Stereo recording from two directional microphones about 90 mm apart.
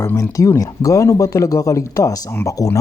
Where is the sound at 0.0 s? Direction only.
35° left (ahead or behind).